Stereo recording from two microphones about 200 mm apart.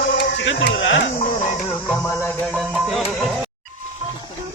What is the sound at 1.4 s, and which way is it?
Music, 35° left (ahead or behind).